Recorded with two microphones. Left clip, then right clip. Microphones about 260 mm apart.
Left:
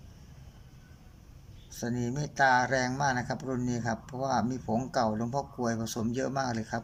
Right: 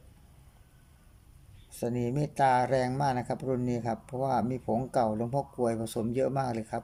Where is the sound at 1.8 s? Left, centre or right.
Centre.